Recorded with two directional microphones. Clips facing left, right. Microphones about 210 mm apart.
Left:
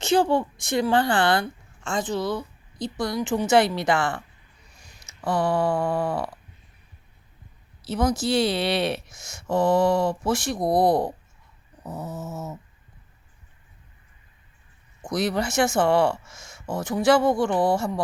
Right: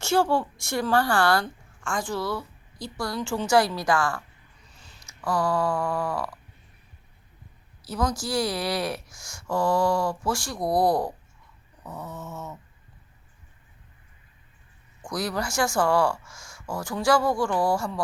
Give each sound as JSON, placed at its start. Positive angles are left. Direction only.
{"t": 0.0, "sound": "speech", "side_deg": 15}
{"t": 4.7, "sound": "a sound", "side_deg": 15}
{"t": 7.9, "sound": "speech", "side_deg": 25}
{"t": 11.9, "sound": "dog", "side_deg": 5}
{"t": 15.0, "sound": "speech", "side_deg": 20}